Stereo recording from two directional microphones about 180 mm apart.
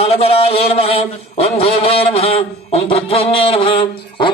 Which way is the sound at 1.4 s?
35° left (ahead or behind).